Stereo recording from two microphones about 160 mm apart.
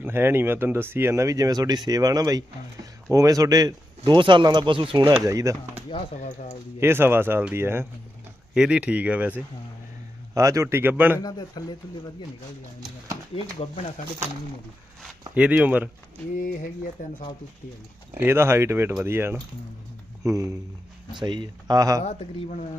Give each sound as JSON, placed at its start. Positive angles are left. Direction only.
{"t": 0.0, "sound": "speech", "side_deg": -15}
{"t": 6.7, "sound": "speech", "side_deg": -15}
{"t": 11.2, "sound": "speech", "side_deg": 25}
{"t": 13.3, "sound": "speech", "side_deg": 35}
{"t": 15.4, "sound": "speech", "side_deg": -10}
{"t": 16.3, "sound": "speech", "side_deg": 60}
{"t": 18.2, "sound": "speech", "side_deg": -15}
{"t": 22.0, "sound": "speech", "side_deg": 40}